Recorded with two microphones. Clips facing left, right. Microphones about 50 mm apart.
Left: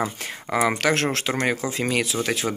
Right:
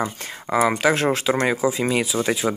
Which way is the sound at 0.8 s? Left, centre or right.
Centre.